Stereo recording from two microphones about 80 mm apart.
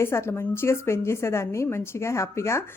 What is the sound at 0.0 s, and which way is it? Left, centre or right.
A woman's voice, left.